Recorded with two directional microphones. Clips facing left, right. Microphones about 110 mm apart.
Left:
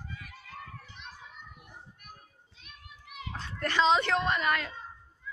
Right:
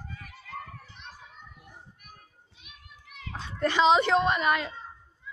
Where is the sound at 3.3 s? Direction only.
15° right (ahead or behind).